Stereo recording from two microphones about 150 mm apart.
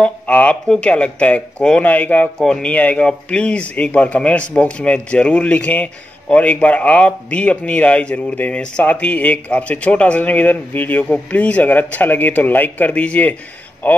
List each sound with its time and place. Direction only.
0.0 s a man's voice: 10° left (ahead or behind)